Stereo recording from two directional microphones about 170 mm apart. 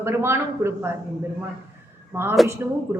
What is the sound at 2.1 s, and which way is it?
Speech, 15° right (ahead or behind).